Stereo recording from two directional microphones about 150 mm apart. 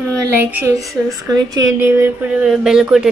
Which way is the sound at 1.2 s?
25° right (ahead or behind).